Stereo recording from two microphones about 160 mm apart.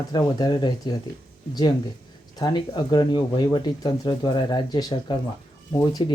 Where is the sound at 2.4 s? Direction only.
25° left (ahead or behind).